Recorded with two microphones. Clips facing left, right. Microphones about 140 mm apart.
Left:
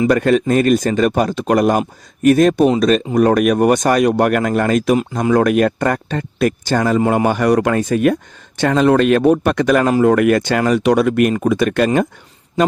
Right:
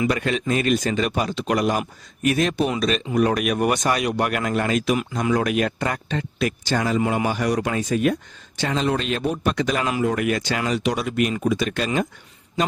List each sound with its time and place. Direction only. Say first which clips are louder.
0.1 s speech: left 9 dB; 45° left (ahead or behind)